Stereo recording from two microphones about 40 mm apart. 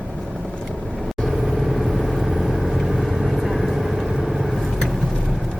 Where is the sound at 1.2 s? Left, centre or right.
Centre.